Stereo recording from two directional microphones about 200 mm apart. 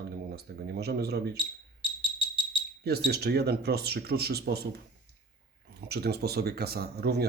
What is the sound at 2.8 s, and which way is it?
Speech, 55° right (ahead or behind).